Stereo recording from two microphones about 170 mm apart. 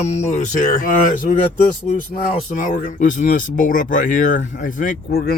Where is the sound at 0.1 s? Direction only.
40° left (ahead or behind).